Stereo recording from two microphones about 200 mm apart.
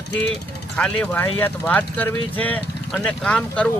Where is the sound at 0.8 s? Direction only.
5° left (ahead or behind).